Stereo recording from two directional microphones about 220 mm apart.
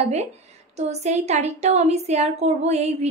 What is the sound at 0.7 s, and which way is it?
Speech, 30° right (ahead or behind).